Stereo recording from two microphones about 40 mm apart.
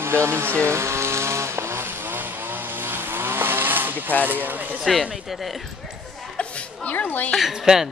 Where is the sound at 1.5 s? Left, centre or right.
Right.